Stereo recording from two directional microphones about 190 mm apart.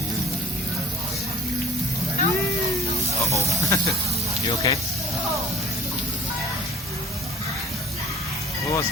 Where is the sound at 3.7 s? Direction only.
15° left (ahead or behind).